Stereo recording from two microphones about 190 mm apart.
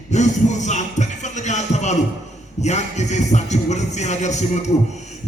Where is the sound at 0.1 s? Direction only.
40° left (ahead or behind).